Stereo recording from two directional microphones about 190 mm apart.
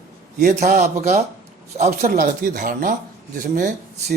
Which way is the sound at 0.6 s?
40° right (ahead or behind).